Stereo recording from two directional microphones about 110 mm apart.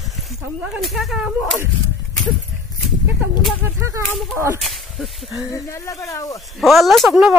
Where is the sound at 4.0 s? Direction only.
30° right (ahead or behind).